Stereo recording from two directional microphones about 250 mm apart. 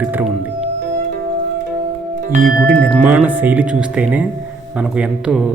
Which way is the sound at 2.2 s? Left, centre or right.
Right.